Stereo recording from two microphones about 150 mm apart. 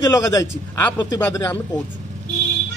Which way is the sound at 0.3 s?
25° left (ahead or behind).